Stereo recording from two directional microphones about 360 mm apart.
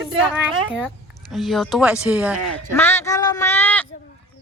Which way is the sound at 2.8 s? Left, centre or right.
Centre.